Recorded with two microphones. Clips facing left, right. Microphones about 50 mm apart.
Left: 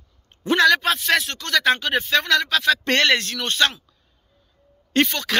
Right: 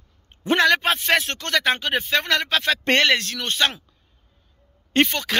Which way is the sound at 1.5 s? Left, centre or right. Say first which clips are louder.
Left 2 dB; centre.